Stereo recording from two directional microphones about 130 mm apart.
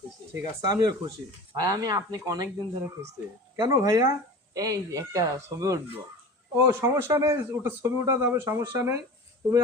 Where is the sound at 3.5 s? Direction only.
25° right (ahead or behind).